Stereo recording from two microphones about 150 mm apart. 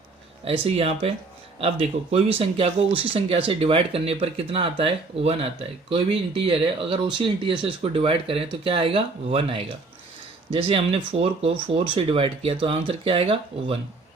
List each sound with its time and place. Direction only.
0.6 s speech: 40° right (ahead or behind)